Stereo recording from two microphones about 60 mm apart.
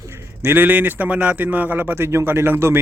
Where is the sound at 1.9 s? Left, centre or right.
Right.